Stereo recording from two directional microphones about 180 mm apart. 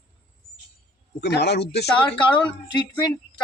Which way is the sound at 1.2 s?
65° left (ahead or behind).